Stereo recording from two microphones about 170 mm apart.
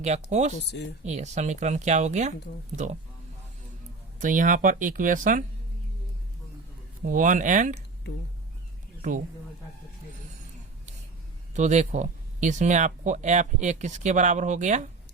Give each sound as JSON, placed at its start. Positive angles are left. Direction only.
{"t": 0.0, "sound": "speech", "side_deg": -40}
{"t": 4.2, "sound": "speech", "side_deg": -50}
{"t": 7.1, "sound": "speech", "side_deg": -50}
{"t": 9.0, "sound": "a sound", "side_deg": -50}
{"t": 11.5, "sound": "speech", "side_deg": -45}